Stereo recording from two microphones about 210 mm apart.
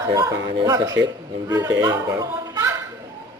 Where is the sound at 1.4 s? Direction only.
15° right (ahead or behind).